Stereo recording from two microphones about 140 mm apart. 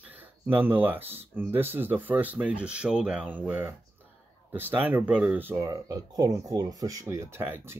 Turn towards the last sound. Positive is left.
turn(degrees=-15)  # may be behind; listen again after turning